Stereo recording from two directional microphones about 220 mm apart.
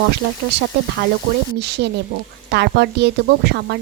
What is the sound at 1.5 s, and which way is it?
A woman's voice, 50° right (ahead or behind).